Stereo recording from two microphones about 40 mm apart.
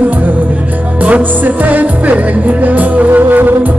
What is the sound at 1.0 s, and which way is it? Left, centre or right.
Music, right.